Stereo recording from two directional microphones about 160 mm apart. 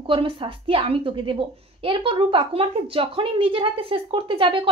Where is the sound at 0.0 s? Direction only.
30° right (ahead or behind).